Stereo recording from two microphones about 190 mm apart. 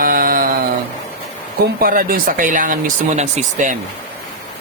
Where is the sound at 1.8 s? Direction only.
50° right (ahead or behind).